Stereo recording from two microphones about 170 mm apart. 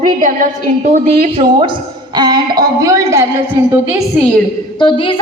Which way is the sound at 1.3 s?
30° right (ahead or behind).